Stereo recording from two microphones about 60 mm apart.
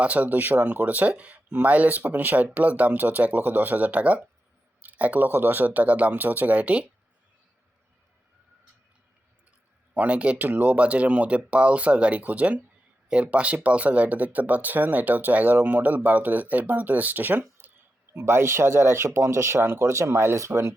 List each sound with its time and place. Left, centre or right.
0.0 s speech: right
9.9 s speech: right
17.6 s a sound: right
18.2 s speech: right